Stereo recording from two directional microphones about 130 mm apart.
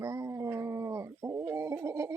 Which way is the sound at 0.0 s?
20° right (ahead or behind).